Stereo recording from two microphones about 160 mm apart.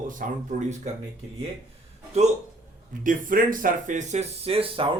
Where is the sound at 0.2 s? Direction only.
60° right (ahead or behind).